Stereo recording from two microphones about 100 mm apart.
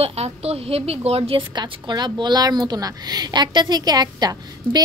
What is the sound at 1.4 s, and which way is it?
A woman's voice, 50° right (ahead or behind).